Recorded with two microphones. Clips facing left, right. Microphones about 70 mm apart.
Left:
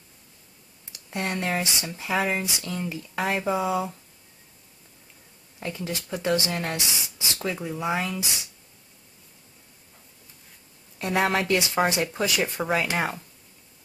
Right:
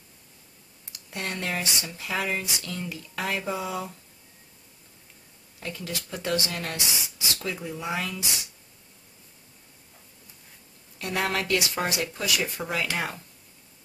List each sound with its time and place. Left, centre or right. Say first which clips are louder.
1.1 s speech: left 4 dB; left
2.1 s speech: left 4 dB; centre
2.4 s speech: left 3 dB; left
5.6 s speech: left 3 dB; left
11.0 s speech: left 4 dB; left